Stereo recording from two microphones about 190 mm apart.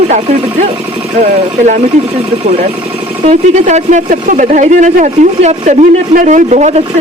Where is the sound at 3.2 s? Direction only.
40° right (ahead or behind).